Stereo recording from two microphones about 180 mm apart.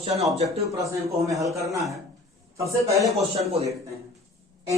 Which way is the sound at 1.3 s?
15° right (ahead or behind).